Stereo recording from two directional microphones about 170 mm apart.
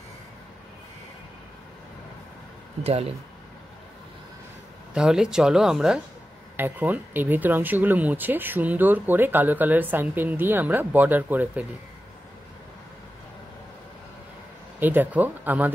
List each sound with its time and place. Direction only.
2.8 s speech: 35° right (ahead or behind)
4.9 s speech: 5° right (ahead or behind)
14.8 s speech: 10° right (ahead or behind)